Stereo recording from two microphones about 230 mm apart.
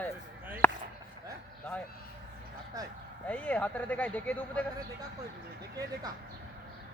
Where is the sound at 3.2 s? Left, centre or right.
Centre.